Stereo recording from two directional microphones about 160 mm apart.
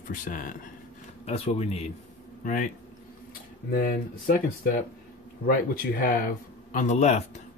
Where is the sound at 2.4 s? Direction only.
55° left (ahead or behind).